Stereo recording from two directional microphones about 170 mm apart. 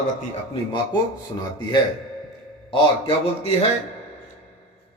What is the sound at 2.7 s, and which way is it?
Speech, 35° left (ahead or behind).